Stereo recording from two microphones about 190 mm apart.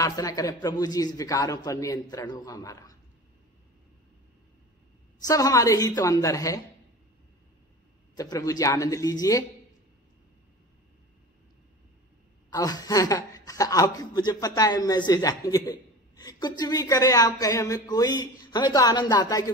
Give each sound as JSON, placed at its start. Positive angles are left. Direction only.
{"t": 0.0, "sound": "speech", "side_deg": 20}
{"t": 5.2, "sound": "a woman's voice", "side_deg": 20}
{"t": 8.2, "sound": "speech", "side_deg": 20}
{"t": 12.4, "sound": "speech", "side_deg": 20}